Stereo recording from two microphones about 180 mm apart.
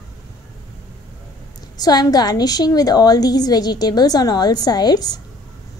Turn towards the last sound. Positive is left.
turn(degrees=20)  # may be behind; listen again after turning